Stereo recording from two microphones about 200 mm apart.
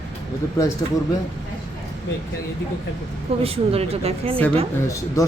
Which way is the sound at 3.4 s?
30° right (ahead or behind).